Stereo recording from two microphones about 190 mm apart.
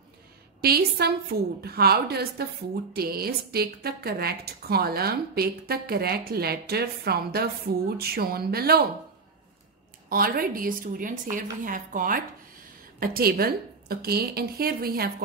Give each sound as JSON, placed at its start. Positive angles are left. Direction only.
{"t": 0.6, "sound": "a woman's voice", "side_deg": -55}
{"t": 10.0, "sound": "a woman's voice", "side_deg": -50}